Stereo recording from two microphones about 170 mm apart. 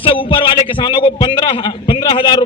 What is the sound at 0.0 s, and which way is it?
A man's voice, 30° left (ahead or behind).